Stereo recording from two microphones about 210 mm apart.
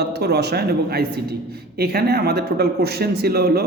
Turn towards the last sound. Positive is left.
turn(degrees=-50)  # may be behind; listen again after turning